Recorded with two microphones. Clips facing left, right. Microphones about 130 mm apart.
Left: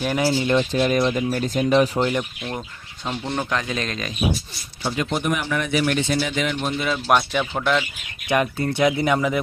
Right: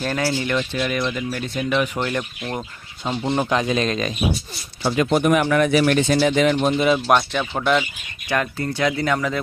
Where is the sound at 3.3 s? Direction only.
20° right (ahead or behind).